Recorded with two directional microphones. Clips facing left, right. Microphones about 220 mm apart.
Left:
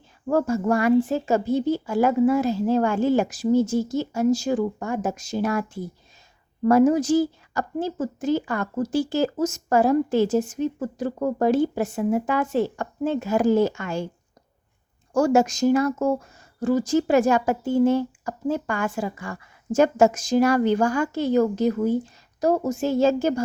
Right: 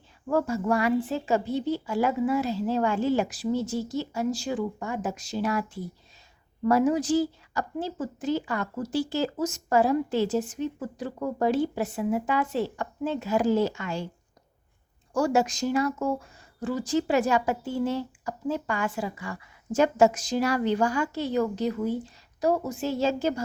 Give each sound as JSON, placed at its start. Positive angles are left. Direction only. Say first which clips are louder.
{"t": 0.3, "sound": "speech", "louder": "left 4 dB", "side_deg": 45}
{"t": 15.1, "sound": "speech", "louder": "left 5 dB", "side_deg": 45}